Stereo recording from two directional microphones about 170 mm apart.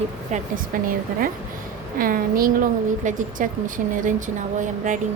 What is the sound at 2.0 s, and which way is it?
A woman's voice, 55° right (ahead or behind).